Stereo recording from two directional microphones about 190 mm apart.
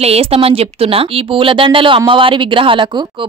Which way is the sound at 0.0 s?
30° right (ahead or behind).